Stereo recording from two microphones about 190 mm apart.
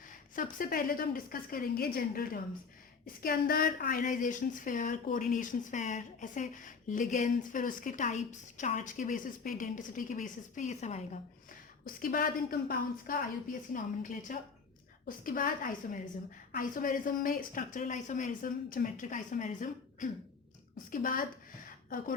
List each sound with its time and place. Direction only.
0.3 s a woman's voice: 45° left (ahead or behind)
12.0 s a woman's voice: 50° left (ahead or behind)